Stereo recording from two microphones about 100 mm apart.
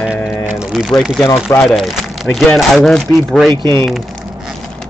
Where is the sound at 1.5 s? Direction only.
20° left (ahead or behind).